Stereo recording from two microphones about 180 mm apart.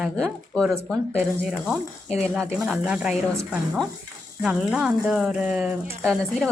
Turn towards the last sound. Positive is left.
turn(degrees=0)  # may be behind; listen again after turning